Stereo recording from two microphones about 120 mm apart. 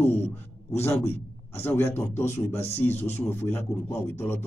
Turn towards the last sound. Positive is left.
turn(degrees=15)  # may be behind; listen again after turning